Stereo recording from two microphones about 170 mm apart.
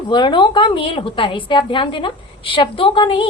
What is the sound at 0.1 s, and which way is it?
A woman's voice, 25° left (ahead or behind).